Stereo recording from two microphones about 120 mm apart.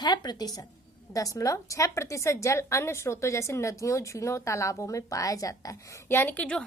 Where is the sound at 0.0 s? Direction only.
35° left (ahead or behind).